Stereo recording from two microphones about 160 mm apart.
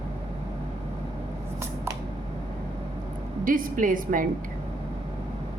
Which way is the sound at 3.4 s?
60° right (ahead or behind).